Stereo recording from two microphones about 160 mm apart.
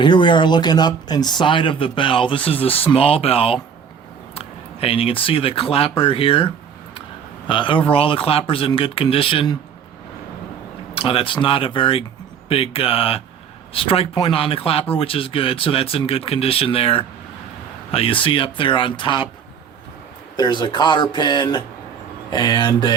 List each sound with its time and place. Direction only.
0.0 s speech: 30° left (ahead or behind)
10.9 s speech: 35° left (ahead or behind)
20.3 s speech: 25° left (ahead or behind)